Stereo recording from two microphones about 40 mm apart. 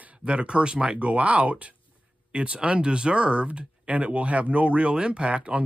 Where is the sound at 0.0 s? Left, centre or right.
Right.